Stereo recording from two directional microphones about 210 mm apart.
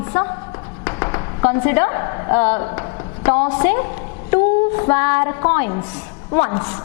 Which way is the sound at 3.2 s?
10° left (ahead or behind).